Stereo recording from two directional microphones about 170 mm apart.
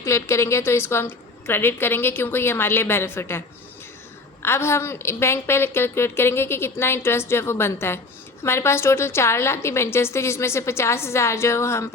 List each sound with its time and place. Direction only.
0.0 s a woman's voice: 15° left (ahead or behind)
4.4 s a woman's voice: 15° left (ahead or behind)